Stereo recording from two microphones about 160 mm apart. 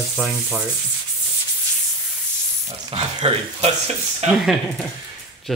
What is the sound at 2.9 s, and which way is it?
Speech, 40° right (ahead or behind).